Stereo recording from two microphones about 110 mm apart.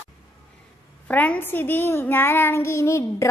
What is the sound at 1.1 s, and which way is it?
A child's voice, 15° left (ahead or behind).